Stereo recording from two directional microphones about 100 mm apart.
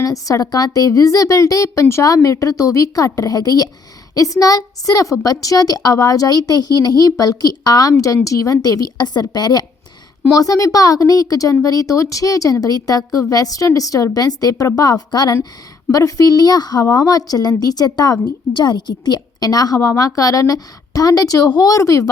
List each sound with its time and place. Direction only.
0.0 s speech: 35° left (ahead or behind)